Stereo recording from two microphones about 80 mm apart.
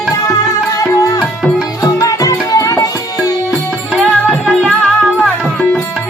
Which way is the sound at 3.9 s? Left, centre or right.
Centre.